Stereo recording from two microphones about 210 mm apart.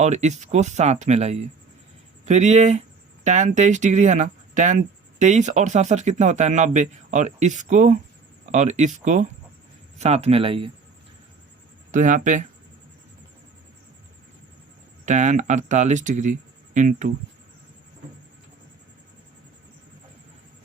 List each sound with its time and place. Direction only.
0.0 s speech: 35° right (ahead or behind)
11.9 s speech: 40° right (ahead or behind)
15.0 s speech: 35° right (ahead or behind)